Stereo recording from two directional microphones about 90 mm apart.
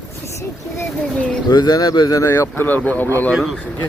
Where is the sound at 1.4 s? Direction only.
50° left (ahead or behind).